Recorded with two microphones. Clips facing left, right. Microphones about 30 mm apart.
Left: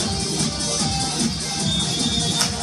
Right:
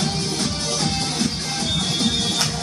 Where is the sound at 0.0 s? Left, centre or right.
Centre.